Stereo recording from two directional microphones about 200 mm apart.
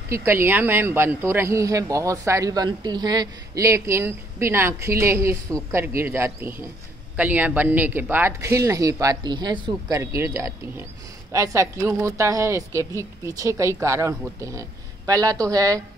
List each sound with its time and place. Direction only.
0.1 s a man's voice: 10° right (ahead or behind)